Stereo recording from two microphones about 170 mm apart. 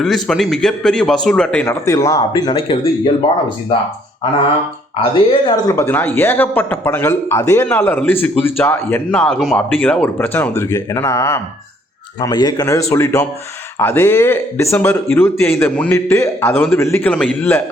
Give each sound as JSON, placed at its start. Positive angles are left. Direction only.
{"t": 0.0, "sound": "a man's voice", "side_deg": 0}
{"t": 1.6, "sound": "speech", "side_deg": 15}
{"t": 4.9, "sound": "speech", "side_deg": 30}